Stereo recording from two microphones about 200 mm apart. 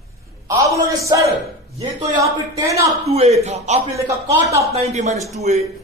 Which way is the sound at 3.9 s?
15° right (ahead or behind).